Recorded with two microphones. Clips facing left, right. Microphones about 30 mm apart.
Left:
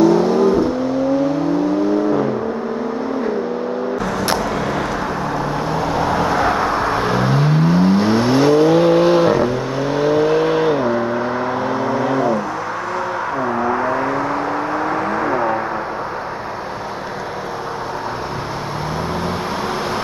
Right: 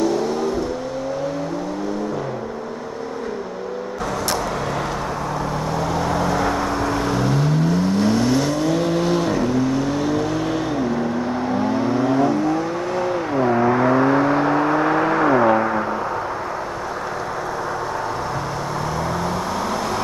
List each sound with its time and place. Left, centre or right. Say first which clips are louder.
0.0 s vehicle: left 7 dB; centre
5.8 s vehicle: left 3 dB; left